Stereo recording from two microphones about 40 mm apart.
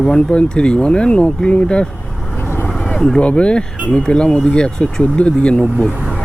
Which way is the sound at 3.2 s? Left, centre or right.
Left.